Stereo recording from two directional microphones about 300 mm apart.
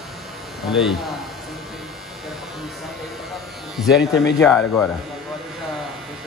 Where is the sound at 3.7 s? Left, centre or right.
Centre.